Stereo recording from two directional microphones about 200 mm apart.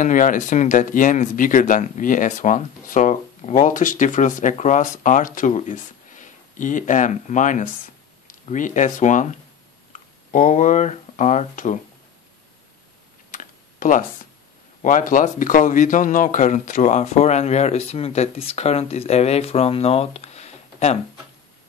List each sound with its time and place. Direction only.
0.0 s speech: 40° left (ahead or behind)
13.3 s computer keyboard: 40° left (ahead or behind)
14.8 s speech: 40° left (ahead or behind)